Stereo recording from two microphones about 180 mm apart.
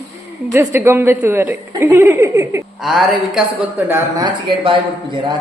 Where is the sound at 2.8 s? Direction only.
Centre (ahead or behind).